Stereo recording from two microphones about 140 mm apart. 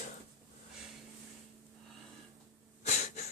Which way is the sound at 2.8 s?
55° left (ahead or behind).